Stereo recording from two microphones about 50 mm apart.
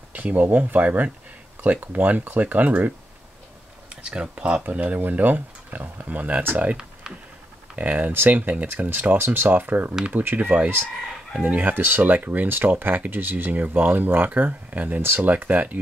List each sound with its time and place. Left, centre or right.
0.1 s speech: right
3.9 s speech: right
4.6 s speech: right
6.8 s computer keyboard: centre
7.7 s speech: right